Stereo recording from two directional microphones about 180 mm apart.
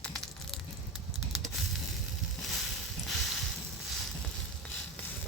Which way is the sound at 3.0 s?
Centre (ahead or behind).